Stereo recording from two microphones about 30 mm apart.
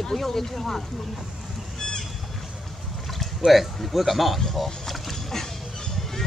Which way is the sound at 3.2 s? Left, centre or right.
Centre.